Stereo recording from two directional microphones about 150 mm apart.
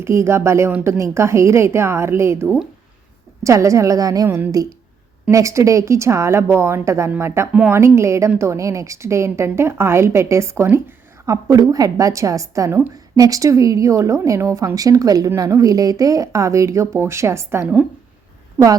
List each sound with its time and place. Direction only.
0.0 s a woman's voice: 20° right (ahead or behind)
18.6 s speech: 5° right (ahead or behind)